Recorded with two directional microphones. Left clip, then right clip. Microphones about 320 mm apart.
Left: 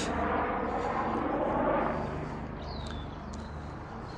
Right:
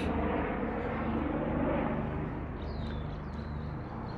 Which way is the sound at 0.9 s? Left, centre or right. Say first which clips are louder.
Left 4 dB; left.